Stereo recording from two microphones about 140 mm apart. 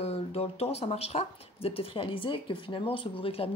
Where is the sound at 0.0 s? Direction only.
45° left (ahead or behind).